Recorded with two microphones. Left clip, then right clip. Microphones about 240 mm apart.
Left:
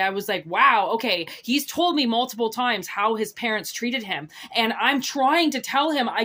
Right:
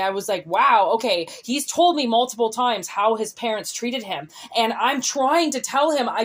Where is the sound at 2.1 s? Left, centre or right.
Left.